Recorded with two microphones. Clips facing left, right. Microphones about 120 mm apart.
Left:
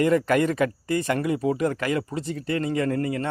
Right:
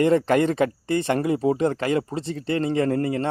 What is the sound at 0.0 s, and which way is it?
Speech, 30° right (ahead or behind).